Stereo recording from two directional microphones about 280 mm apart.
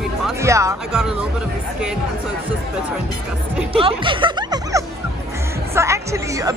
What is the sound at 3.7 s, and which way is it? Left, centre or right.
Music, centre.